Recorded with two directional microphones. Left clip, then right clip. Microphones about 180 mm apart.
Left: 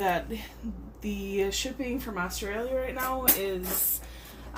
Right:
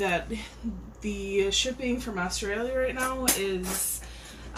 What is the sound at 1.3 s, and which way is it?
Speech, 35° left (ahead or behind).